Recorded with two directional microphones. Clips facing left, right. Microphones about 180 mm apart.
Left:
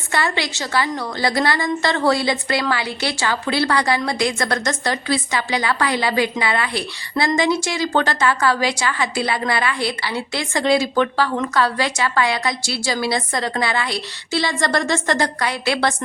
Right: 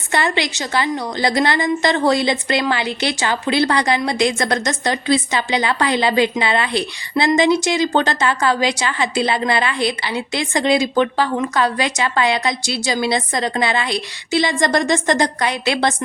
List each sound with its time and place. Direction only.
0.1 s a woman's voice: 20° right (ahead or behind)